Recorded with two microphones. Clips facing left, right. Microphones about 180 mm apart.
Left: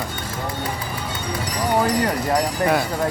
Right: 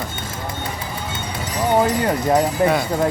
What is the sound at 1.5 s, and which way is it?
Speech, 20° right (ahead or behind).